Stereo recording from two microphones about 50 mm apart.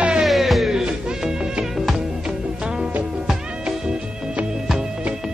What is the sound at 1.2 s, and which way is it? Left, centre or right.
Music, centre.